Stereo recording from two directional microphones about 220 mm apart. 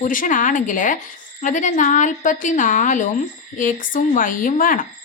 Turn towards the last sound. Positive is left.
turn(degrees=40)  # may be behind; listen again after turning